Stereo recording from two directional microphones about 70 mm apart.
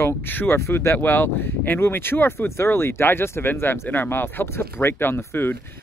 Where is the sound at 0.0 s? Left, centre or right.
Left.